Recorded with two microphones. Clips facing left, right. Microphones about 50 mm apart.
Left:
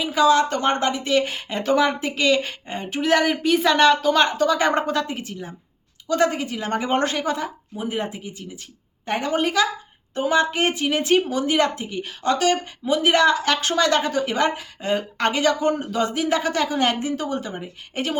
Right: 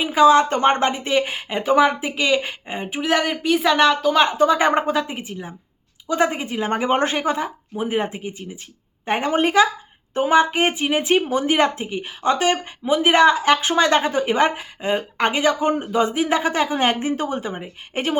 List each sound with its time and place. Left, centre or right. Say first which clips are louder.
0.0 s speech: right 4 dB; right
3.0 s speech: left 2 dB; centre
4.4 s a woman's voice: right 3 dB; right